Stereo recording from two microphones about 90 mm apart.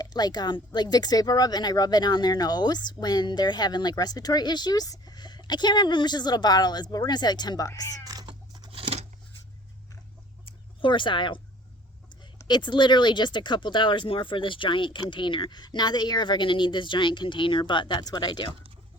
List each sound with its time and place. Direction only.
0.0 s speech: 50° left (ahead or behind)
8.0 s cat: 45° right (ahead or behind)
8.7 s scissors: 90° right
10.4 s chicken: 70° left (ahead or behind)
12.5 s speech: 60° left (ahead or behind)